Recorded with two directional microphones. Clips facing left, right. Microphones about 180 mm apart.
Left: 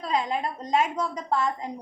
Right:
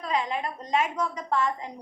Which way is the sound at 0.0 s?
35° left (ahead or behind).